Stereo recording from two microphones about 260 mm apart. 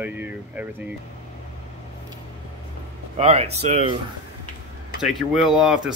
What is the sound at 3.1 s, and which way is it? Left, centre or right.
Speech, right.